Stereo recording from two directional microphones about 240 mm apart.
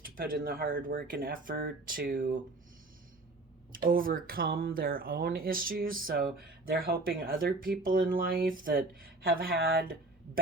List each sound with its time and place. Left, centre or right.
0.0 s speech: right
3.7 s speech: right